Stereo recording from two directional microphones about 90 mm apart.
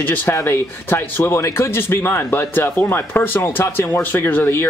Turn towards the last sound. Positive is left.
turn(degrees=25)  # may be behind; listen again after turning